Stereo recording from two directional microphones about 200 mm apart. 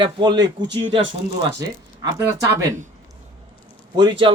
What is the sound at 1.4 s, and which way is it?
Speech, 15° right (ahead or behind).